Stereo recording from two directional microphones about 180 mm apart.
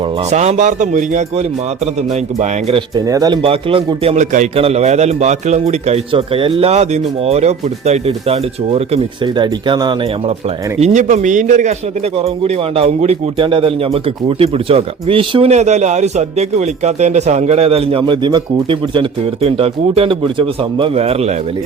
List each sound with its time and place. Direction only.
0.3 s a man's voice: 40° right (ahead or behind)
2.9 s speech: 20° right (ahead or behind)
3.4 s a man's voice: 30° right (ahead or behind)
10.8 s a man's voice: 40° right (ahead or behind)